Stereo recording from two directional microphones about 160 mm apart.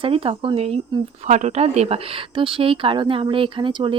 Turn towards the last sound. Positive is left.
turn(degrees=-30)  # may be behind; listen again after turning